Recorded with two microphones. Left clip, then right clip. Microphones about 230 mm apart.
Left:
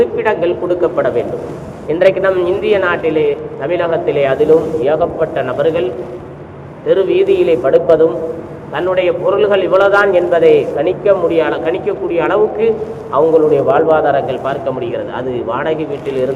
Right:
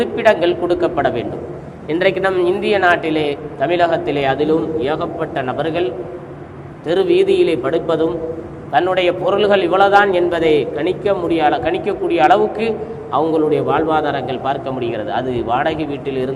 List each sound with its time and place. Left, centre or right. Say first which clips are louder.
0.0 s a man's voice: left 1 dB; right